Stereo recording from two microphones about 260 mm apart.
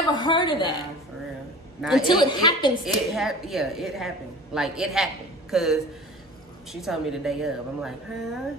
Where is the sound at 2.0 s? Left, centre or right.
Centre.